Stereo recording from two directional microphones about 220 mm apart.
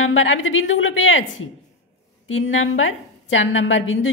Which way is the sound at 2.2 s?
65° left (ahead or behind).